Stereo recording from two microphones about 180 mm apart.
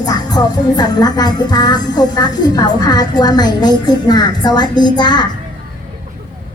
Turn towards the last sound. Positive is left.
turn(degrees=25)  # may be behind; listen again after turning